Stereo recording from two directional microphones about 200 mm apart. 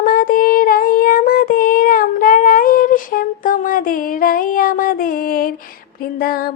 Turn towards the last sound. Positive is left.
turn(degrees=50)  # may be behind; listen again after turning